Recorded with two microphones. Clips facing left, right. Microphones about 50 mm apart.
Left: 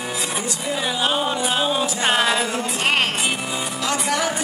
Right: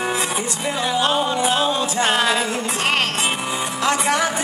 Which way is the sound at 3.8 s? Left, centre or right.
Right.